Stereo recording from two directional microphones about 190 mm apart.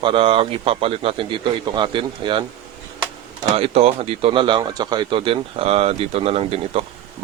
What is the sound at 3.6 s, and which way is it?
Speech, 30° right (ahead or behind).